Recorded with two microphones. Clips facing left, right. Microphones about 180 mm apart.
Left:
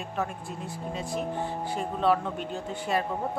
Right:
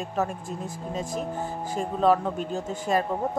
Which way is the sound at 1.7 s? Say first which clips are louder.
Right 4 dB; 40° right (ahead or behind).